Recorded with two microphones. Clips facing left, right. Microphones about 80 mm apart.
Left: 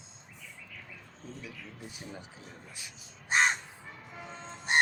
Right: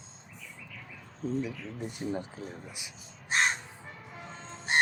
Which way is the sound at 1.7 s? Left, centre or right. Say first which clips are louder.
Right 8 dB; right.